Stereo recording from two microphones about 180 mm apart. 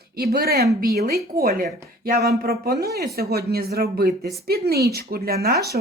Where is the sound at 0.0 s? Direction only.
60° right (ahead or behind).